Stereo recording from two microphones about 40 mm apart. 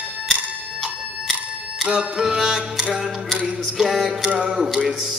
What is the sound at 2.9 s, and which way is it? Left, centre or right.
Music, right.